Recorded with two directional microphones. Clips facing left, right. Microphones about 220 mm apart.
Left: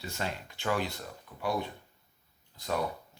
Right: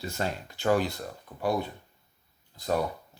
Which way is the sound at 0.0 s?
40° right (ahead or behind).